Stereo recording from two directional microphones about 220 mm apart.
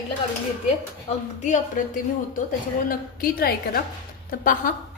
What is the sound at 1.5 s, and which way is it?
Speech, 35° left (ahead or behind).